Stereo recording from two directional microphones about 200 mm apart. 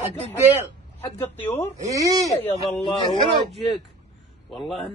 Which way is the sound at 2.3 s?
30° left (ahead or behind).